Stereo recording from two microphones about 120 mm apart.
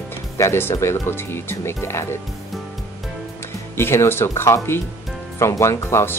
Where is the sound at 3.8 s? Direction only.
20° left (ahead or behind).